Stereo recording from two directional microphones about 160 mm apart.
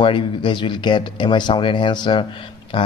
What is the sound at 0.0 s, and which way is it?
Speech, 30° left (ahead or behind).